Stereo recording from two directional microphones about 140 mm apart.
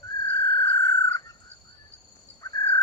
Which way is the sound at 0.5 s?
25° left (ahead or behind).